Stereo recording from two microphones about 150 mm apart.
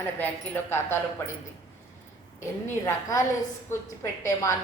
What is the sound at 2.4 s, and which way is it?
A woman's voice, 20° left (ahead or behind).